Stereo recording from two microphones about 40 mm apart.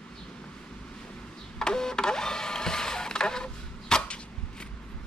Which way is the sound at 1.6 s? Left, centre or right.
Centre.